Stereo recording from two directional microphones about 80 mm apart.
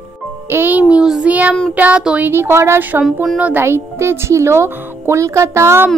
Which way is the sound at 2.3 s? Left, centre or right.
Right.